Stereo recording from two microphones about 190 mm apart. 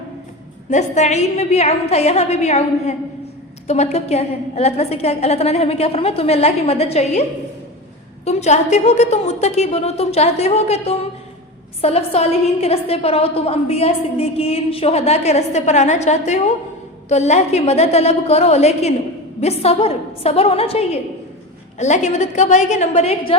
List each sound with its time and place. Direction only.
0.7 s a woman's voice: 40° left (ahead or behind)